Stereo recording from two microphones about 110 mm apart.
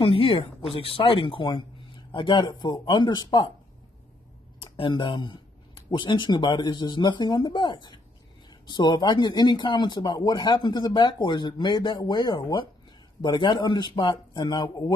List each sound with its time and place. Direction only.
0.0 s speech: 55° left (ahead or behind)
4.6 s speech: 50° left (ahead or behind)